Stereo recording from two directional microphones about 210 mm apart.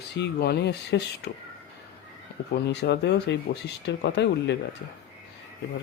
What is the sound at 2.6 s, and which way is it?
Speech, 55° left (ahead or behind).